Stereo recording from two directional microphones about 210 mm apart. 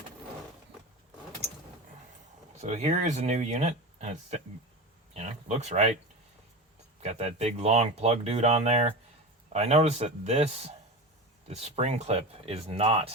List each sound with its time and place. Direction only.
2.6 s speech: 30° right (ahead or behind)
7.0 s speech: 30° right (ahead or behind)